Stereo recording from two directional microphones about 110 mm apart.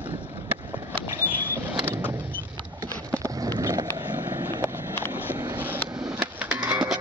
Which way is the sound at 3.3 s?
35° right (ahead or behind).